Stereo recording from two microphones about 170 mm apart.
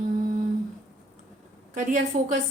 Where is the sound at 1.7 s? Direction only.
50° right (ahead or behind).